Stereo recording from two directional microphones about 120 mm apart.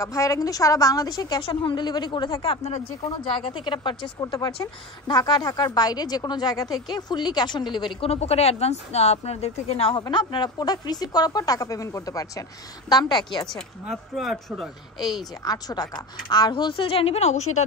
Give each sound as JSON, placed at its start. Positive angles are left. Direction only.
{"t": 0.0, "sound": "a woman's voice", "side_deg": 25}
{"t": 1.4, "sound": "speech", "side_deg": 45}
{"t": 3.3, "sound": "speech", "side_deg": 45}
{"t": 8.1, "sound": "a woman's voice", "side_deg": 60}
{"t": 10.1, "sound": "speech", "side_deg": 40}
{"t": 13.5, "sound": "speech", "side_deg": 0}
{"t": 15.4, "sound": "speech", "side_deg": 35}